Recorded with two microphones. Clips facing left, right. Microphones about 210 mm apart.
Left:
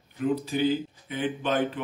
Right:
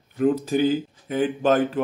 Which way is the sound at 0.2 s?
45° right (ahead or behind).